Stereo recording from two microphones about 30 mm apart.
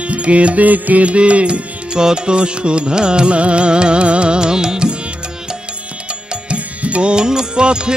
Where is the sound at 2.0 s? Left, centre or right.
Right.